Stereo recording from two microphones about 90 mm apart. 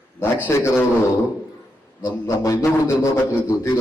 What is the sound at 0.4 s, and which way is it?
Speech, 25° left (ahead or behind).